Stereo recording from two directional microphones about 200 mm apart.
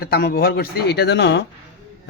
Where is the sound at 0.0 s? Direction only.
50° left (ahead or behind).